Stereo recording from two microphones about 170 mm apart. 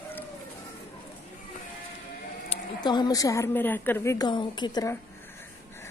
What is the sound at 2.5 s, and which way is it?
A woman's voice, 25° left (ahead or behind).